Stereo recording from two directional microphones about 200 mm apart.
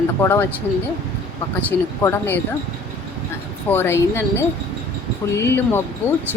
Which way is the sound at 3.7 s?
10° left (ahead or behind).